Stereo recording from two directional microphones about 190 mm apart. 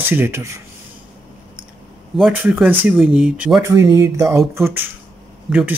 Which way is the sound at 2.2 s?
5° right (ahead or behind).